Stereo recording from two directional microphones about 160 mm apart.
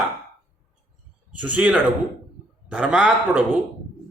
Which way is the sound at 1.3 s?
10° right (ahead or behind).